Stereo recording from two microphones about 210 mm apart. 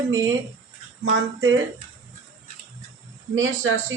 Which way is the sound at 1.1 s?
60° right (ahead or behind).